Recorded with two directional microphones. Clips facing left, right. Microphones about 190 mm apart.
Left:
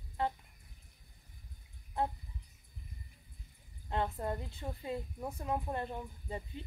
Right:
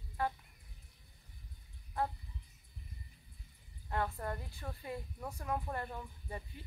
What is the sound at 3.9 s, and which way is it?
Speech, 20° left (ahead or behind).